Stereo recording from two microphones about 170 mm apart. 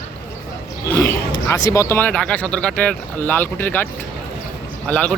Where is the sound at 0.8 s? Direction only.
15° left (ahead or behind).